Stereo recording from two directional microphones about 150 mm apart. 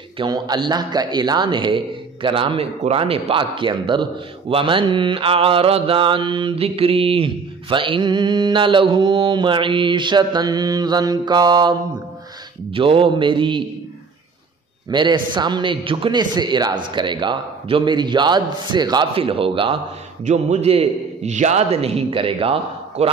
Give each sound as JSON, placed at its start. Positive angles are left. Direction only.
{"t": 0.2, "sound": "a man's voice", "side_deg": -30}
{"t": 12.7, "sound": "a man's voice", "side_deg": -35}
{"t": 14.9, "sound": "a man's voice", "side_deg": -30}
{"t": 20.2, "sound": "a man's voice", "side_deg": -50}